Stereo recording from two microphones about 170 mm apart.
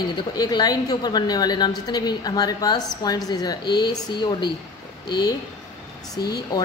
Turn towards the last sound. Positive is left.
turn(degrees=20)  # may be behind; listen again after turning